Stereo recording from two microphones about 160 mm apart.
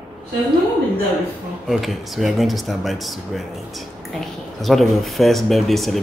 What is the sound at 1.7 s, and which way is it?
Speech, centre (ahead or behind).